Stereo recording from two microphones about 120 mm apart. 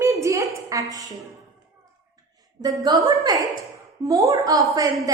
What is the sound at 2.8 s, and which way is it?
A woman's voice, 30° right (ahead or behind).